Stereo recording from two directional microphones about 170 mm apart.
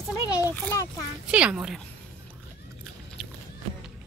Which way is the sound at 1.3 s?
5° right (ahead or behind).